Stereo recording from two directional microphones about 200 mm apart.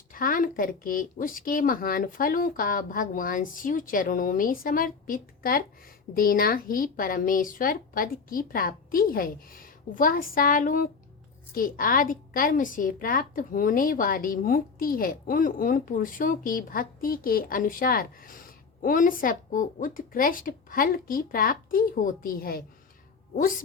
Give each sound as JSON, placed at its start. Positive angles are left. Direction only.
{"t": 0.1, "sound": "a woman's voice", "side_deg": 45}